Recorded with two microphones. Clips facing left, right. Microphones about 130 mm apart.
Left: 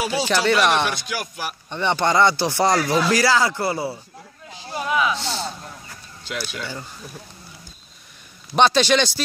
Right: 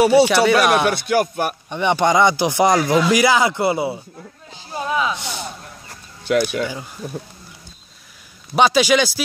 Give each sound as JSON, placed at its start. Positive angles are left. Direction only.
{"t": 0.3, "sound": "speech", "side_deg": -10}
{"t": 0.8, "sound": "music", "side_deg": -55}
{"t": 1.7, "sound": "speech", "side_deg": -15}
{"t": 6.2, "sound": "speech", "side_deg": -55}
{"t": 8.5, "sound": "speech", "side_deg": -10}